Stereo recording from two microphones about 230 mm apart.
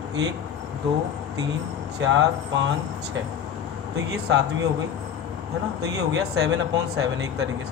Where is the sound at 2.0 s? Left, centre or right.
Right.